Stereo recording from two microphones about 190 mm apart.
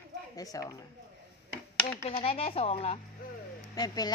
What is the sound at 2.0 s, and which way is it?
Speech, 30° left (ahead or behind).